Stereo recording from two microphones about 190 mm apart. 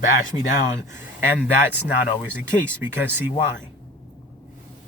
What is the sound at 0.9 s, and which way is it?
Speech, 10° right (ahead or behind).